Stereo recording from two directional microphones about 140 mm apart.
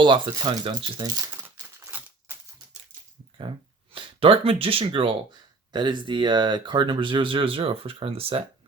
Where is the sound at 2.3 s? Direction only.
15° right (ahead or behind).